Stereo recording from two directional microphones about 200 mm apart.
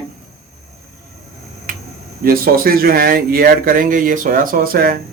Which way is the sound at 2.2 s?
45° right (ahead or behind).